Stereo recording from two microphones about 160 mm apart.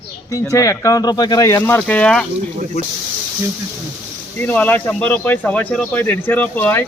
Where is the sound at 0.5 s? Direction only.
20° left (ahead or behind).